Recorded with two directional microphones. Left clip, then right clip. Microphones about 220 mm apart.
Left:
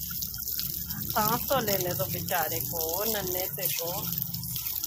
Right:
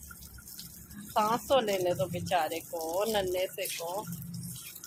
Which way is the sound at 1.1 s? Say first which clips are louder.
Right 1 dB; 15° right (ahead or behind).